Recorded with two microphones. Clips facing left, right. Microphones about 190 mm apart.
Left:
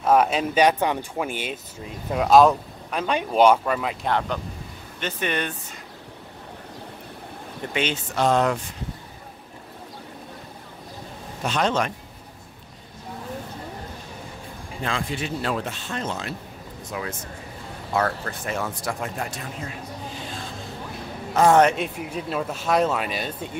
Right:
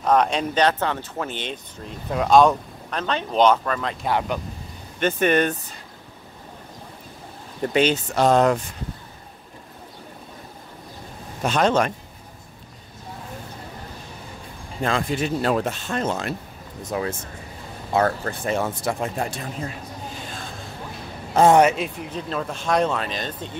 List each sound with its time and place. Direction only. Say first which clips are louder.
0.0 s speech: even; 5° left (ahead or behind)
4.0 s speech: right 1 dB; 10° right (ahead or behind)
5.0 s speech: right 8 dB; 50° right (ahead or behind)
7.7 s speech: right 6 dB; 40° right (ahead or behind)
11.4 s speech: right 4 dB; 45° right (ahead or behind)
14.8 s speech: right 5 dB; 45° right (ahead or behind)
16.9 s speech: right 6 dB; 40° right (ahead or behind)
17.9 s speech: right 4 dB; 30° right (ahead or behind)
21.5 s speech: right 1 dB; 10° right (ahead or behind)
21.7 s speech: even; 5° left (ahead or behind)